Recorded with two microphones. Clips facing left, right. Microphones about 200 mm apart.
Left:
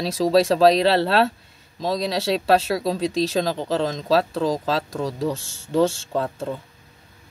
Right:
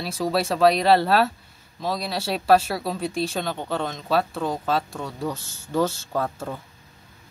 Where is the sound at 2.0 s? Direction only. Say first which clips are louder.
Left 3 dB; 90° left.